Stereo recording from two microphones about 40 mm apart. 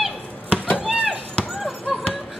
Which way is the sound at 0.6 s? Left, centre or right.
Left.